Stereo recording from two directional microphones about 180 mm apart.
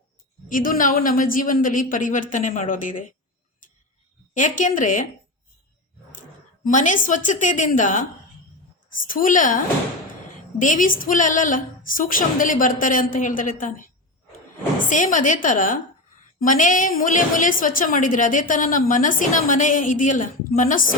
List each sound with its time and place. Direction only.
0.4 s a woman's voice: 50° left (ahead or behind)
4.4 s a woman's voice: 45° left (ahead or behind)
6.7 s a woman's voice: 45° left (ahead or behind)
9.0 s a woman's voice: 50° left (ahead or behind)
10.6 s a woman's voice: 45° left (ahead or behind)